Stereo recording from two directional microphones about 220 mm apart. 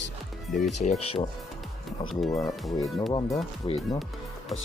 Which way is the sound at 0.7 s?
30° left (ahead or behind).